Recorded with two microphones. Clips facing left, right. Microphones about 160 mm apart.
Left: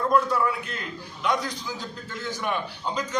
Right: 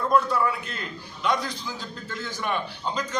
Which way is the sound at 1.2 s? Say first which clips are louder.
Even; 15° left (ahead or behind).